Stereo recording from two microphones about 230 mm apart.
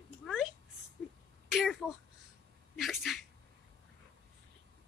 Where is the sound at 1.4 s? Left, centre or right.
Centre.